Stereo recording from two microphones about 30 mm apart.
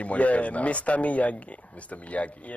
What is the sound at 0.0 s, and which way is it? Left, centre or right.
A man's voice, left.